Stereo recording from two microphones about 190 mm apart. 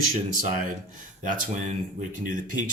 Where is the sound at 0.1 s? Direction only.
35° right (ahead or behind).